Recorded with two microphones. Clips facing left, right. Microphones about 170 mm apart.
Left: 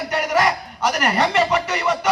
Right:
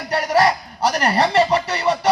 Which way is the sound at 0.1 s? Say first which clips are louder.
Right 3 dB; 30° right (ahead or behind).